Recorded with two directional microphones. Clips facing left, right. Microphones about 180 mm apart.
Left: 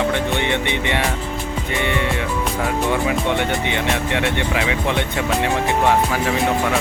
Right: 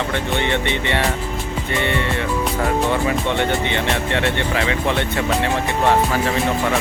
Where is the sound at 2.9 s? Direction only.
10° left (ahead or behind).